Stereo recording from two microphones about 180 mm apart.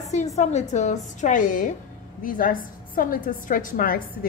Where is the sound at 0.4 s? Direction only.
40° left (ahead or behind).